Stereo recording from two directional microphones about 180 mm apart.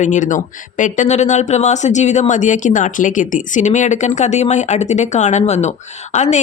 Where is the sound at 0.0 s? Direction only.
45° left (ahead or behind).